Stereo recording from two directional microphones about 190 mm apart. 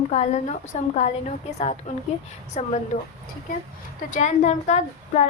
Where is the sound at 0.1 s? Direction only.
35° left (ahead or behind).